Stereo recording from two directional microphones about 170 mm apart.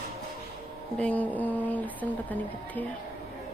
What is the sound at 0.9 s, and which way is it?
Speech, 10° left (ahead or behind).